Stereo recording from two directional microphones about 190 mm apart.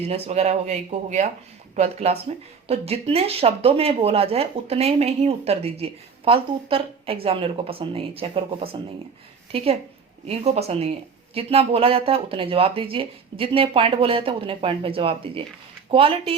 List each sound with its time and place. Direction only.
0.0 s speech: 35° right (ahead or behind)